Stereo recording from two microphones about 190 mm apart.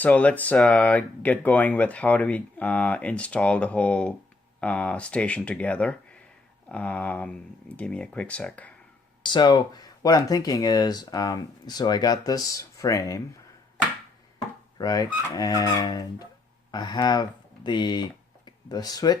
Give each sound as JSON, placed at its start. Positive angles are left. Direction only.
{"t": 0.0, "sound": "speech", "side_deg": 10}
{"t": 9.2, "sound": "speech", "side_deg": 25}
{"t": 14.8, "sound": "speech", "side_deg": 20}